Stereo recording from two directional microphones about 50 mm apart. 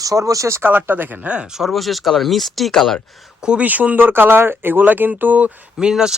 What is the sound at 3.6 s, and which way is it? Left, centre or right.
Speech, right.